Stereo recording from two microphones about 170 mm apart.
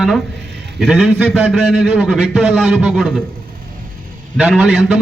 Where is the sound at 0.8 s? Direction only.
Centre (ahead or behind).